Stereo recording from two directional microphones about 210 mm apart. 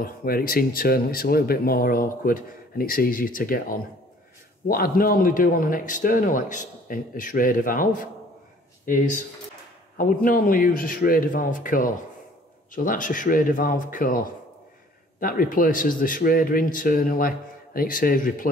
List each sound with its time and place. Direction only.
0.0 s speech: 45° left (ahead or behind)
9.9 s speech: 40° left (ahead or behind)